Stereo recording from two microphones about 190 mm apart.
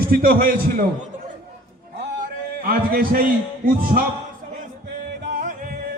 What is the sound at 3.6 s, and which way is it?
Speech, 50° right (ahead or behind).